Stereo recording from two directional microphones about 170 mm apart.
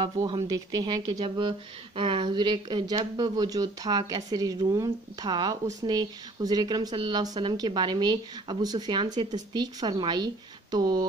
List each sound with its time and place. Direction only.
0.0 s speech: 25° right (ahead or behind)